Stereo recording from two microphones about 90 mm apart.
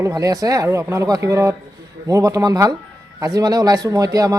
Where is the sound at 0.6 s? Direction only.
30° right (ahead or behind).